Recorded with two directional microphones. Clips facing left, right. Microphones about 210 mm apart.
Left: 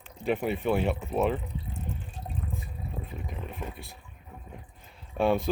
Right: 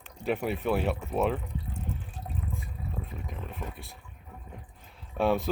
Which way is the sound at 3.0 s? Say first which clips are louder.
Left 1 dB; centre (ahead or behind).